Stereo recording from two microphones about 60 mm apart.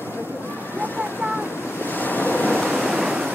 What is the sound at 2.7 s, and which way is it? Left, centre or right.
Waves, centre.